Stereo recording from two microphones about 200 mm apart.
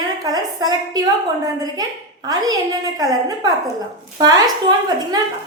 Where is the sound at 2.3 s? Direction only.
20° right (ahead or behind).